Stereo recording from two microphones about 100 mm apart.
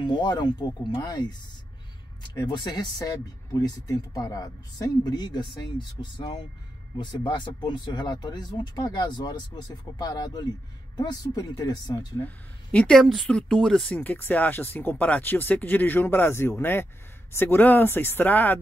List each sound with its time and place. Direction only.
0.0 s speech: 45° left (ahead or behind)
12.7 s speech: 5° left (ahead or behind)
13.9 s speech: 20° left (ahead or behind)